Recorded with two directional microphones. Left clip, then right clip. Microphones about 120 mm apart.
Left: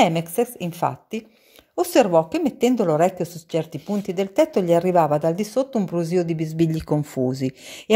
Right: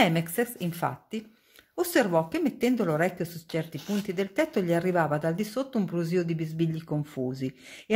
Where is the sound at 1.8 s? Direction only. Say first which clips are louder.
Left 8 dB; 45° left (ahead or behind).